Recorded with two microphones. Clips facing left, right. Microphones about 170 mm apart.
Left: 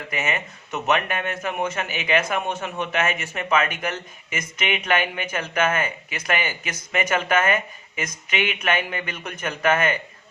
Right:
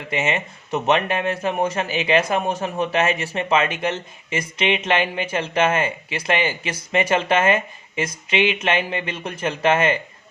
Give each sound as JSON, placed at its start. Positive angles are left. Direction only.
{"t": 0.1, "sound": "speech", "side_deg": -25}